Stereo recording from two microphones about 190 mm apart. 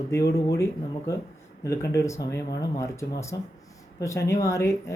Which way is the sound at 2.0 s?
15° left (ahead or behind).